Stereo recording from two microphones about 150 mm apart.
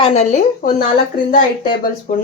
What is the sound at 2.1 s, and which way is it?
Speech, 60° left (ahead or behind).